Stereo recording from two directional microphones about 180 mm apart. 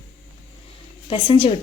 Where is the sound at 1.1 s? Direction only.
30° left (ahead or behind).